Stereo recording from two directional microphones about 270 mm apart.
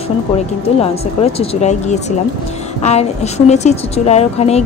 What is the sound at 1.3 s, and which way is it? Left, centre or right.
Speech, left.